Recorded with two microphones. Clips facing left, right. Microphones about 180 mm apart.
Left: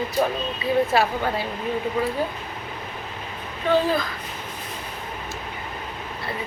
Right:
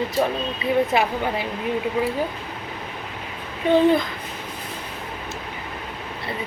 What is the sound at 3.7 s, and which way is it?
Speech, 20° right (ahead or behind).